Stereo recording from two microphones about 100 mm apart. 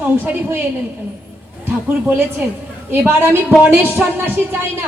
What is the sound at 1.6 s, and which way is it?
A man's voice, 20° right (ahead or behind).